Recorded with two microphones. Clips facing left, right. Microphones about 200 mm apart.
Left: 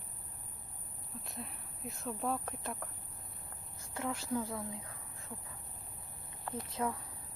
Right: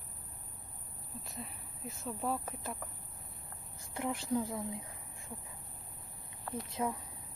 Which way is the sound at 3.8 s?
15° right (ahead or behind).